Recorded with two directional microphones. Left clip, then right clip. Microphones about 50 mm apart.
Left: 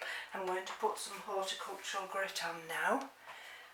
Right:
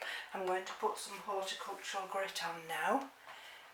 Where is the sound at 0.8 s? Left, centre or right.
Centre.